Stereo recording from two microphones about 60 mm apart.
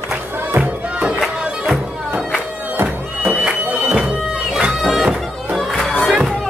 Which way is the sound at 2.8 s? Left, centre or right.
Right.